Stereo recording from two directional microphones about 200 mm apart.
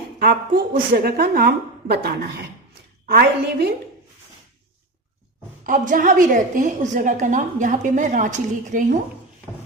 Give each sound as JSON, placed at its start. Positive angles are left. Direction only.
{"t": 0.2, "sound": "a woman's voice", "side_deg": -50}
{"t": 5.6, "sound": "a woman's voice", "side_deg": -40}